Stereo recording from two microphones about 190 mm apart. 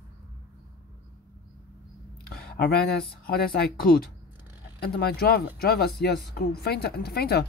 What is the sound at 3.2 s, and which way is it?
A woman's voice, 55° left (ahead or behind).